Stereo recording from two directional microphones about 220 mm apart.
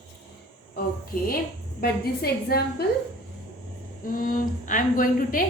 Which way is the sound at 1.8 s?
45° left (ahead or behind).